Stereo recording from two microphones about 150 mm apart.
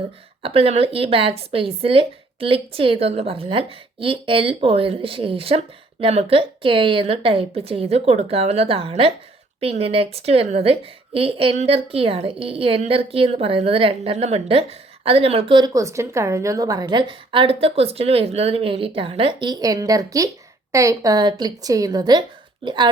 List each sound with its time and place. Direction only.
0.4 s a woman's voice: 40° right (ahead or behind)